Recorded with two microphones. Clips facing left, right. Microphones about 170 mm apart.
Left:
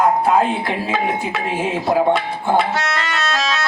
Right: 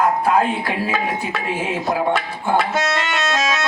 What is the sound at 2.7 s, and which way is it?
Music, 20° right (ahead or behind).